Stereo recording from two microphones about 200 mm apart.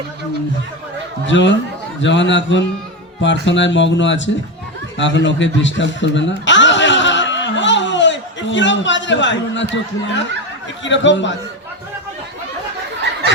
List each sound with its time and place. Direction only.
1.3 s speech: 65° left (ahead or behind)
4.9 s chuckle: 65° left (ahead or behind)
10.8 s speech: 65° left (ahead or behind)